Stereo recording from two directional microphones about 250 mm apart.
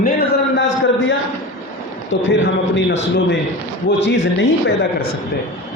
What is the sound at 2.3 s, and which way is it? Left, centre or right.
A man's voice, left.